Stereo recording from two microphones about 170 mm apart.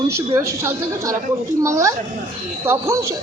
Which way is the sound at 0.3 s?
15° right (ahead or behind).